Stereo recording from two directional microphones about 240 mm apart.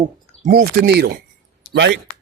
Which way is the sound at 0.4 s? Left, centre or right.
Right.